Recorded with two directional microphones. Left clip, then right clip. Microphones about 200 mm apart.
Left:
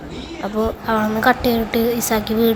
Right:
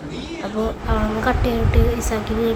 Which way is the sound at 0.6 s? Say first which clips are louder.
Left 4 dB; 25° left (ahead or behind).